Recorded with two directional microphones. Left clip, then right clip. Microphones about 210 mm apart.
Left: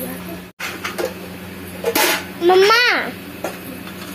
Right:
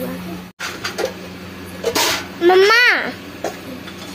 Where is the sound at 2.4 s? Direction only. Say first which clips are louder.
Right 1 dB; 10° right (ahead or behind).